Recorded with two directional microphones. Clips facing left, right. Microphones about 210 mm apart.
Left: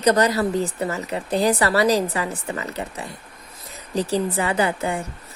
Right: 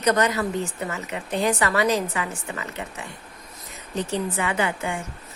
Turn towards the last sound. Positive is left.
turn(degrees=35)  # may be behind; listen again after turning